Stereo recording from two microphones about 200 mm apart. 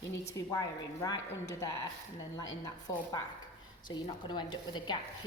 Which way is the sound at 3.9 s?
25° left (ahead or behind).